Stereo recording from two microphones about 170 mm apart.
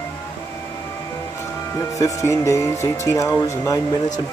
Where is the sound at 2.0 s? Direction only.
20° left (ahead or behind).